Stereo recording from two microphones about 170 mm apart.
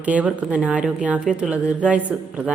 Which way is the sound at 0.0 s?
10° right (ahead or behind).